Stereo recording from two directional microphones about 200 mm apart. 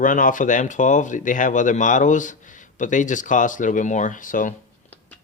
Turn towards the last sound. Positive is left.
turn(degrees=40)  # may be behind; listen again after turning